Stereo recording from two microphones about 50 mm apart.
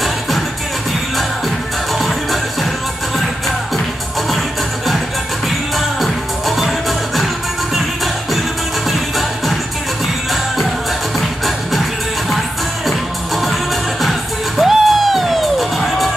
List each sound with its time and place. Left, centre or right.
5.8 s music: centre
11.1 s music: centre
14.6 s music: centre